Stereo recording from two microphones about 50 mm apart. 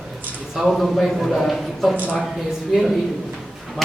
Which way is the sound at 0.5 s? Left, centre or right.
Centre.